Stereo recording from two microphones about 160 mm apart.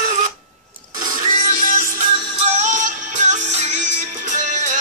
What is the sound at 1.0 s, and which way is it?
Music, 50° right (ahead or behind).